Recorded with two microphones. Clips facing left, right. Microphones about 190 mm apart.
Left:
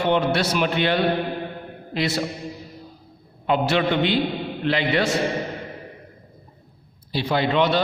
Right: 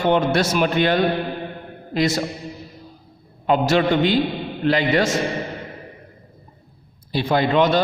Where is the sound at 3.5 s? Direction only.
40° right (ahead or behind).